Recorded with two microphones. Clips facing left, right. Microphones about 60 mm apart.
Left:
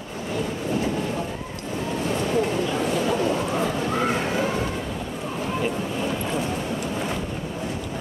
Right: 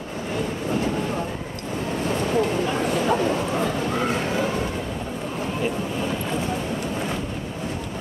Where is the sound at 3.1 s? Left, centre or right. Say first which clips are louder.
Right 3 dB; right.